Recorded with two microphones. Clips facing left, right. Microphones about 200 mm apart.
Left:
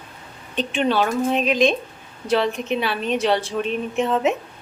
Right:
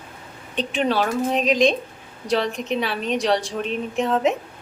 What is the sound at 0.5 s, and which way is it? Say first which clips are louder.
A woman's voice: left 1 dB; centre (ahead or behind).